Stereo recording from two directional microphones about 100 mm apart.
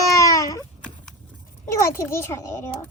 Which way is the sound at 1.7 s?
30° left (ahead or behind).